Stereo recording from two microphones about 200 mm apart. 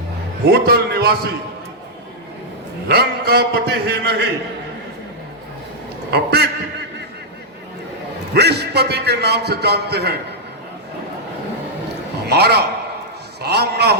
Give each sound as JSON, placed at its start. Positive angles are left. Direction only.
{"t": 0.4, "sound": "a man's voice", "side_deg": -50}
{"t": 2.9, "sound": "a man's voice", "side_deg": -50}
{"t": 6.1, "sound": "a man's voice", "side_deg": -55}
{"t": 8.3, "sound": "a man's voice", "side_deg": -55}
{"t": 12.2, "sound": "a man's voice", "side_deg": -55}